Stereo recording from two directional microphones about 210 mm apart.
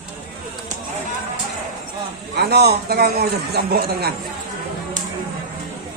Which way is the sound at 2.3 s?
50° right (ahead or behind).